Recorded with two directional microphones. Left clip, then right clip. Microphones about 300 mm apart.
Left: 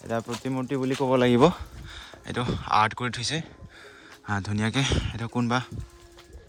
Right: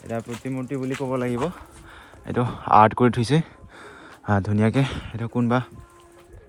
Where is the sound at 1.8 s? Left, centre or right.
Centre.